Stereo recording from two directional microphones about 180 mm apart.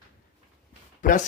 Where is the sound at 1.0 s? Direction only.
50° left (ahead or behind).